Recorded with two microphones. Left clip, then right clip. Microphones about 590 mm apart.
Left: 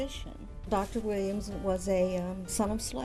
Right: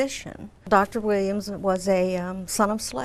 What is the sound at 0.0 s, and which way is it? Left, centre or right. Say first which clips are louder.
A woman's voice: right 11 dB; right.